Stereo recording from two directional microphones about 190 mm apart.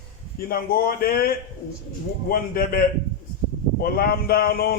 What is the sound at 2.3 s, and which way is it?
Speech, 50° left (ahead or behind).